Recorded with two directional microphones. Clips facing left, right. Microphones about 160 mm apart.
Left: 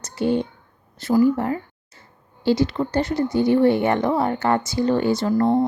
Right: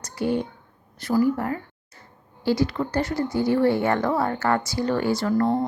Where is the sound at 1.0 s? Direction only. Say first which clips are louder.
Left 4 dB; 25° left (ahead or behind).